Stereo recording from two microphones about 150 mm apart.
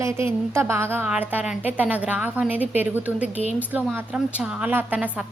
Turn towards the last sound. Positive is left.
turn(degrees=-10)  # may be behind; listen again after turning